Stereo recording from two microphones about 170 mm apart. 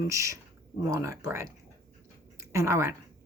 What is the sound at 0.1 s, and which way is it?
Speech, 20° right (ahead or behind).